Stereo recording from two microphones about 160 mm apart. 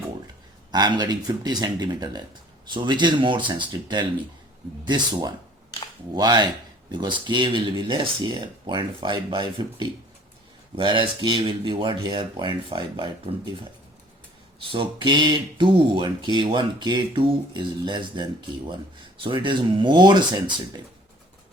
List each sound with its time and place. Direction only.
0.7 s speech: 25° right (ahead or behind)
14.7 s speech: 30° right (ahead or behind)